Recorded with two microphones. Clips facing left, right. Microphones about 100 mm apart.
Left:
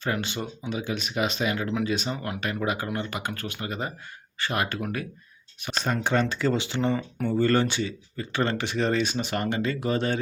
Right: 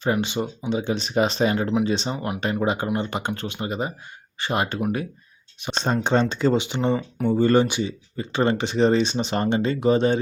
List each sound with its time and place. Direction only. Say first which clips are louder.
0.0 s speech: right 6 dB; 20° right (ahead or behind)